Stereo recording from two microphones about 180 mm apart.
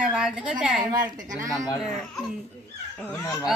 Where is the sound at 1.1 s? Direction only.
45° right (ahead or behind).